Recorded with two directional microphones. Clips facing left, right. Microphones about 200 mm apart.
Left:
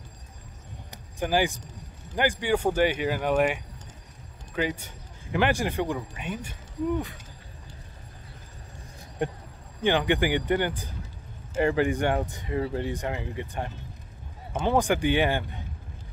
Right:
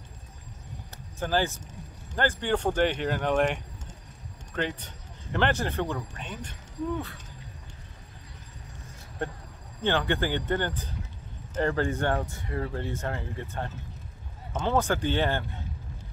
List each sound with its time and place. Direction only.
0.9 s a sound: 15° left (ahead or behind)
2.1 s speech: 10° left (ahead or behind)
9.2 s speech: 15° left (ahead or behind)